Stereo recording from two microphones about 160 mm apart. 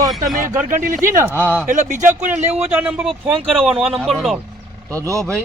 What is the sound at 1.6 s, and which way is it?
Speech, 50° right (ahead or behind).